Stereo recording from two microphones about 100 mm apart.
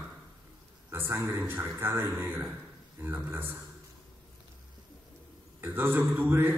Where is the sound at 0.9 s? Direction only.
25° right (ahead or behind).